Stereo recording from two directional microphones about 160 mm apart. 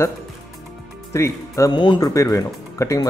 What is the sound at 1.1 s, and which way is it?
Speech, 20° left (ahead or behind).